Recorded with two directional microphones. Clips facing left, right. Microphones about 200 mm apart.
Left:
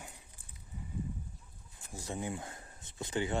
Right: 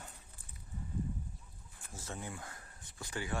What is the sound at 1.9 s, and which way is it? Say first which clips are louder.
Speech: left 6 dB; 15° left (ahead or behind).